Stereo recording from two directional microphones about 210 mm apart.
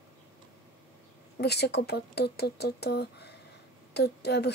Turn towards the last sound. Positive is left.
turn(degrees=50)  # may be behind; listen again after turning